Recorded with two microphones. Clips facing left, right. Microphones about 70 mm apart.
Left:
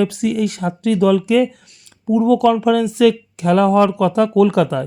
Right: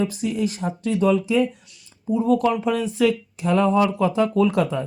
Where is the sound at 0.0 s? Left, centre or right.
Left.